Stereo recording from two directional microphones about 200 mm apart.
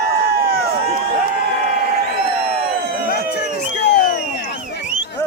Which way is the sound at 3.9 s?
55° left (ahead or behind).